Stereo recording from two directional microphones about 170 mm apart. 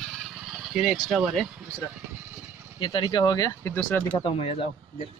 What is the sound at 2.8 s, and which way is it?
Speech, 25° left (ahead or behind).